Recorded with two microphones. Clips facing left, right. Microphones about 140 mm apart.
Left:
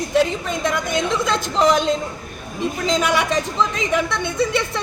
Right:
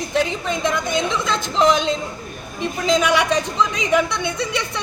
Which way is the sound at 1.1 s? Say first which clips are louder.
Left 2 dB; 40° left (ahead or behind).